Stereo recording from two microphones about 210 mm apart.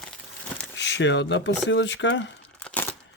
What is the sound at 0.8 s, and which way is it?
Speech, 55° left (ahead or behind).